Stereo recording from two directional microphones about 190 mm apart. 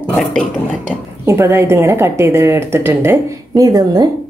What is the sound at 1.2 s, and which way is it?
A woman's voice, 15° right (ahead or behind).